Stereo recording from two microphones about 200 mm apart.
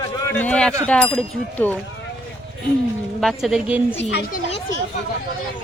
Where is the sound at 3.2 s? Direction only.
Centre (ahead or behind).